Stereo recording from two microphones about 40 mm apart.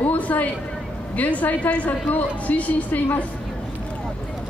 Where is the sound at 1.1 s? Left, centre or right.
Left.